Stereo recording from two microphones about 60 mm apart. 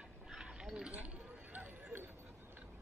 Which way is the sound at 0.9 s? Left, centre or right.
Right.